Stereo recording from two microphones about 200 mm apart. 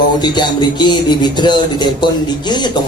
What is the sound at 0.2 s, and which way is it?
Speech, 20° left (ahead or behind).